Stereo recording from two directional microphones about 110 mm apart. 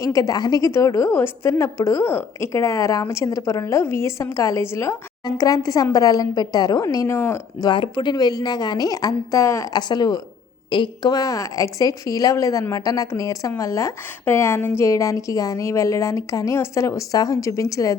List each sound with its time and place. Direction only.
0.0 s a woman's voice: 30° left (ahead or behind)
7.6 s a woman's voice: 45° left (ahead or behind)